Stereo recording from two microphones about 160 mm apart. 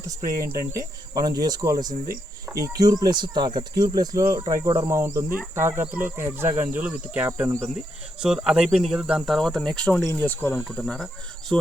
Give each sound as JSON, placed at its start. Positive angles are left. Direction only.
{"t": 0.1, "sound": "speech", "side_deg": -20}
{"t": 8.2, "sound": "speech", "side_deg": -5}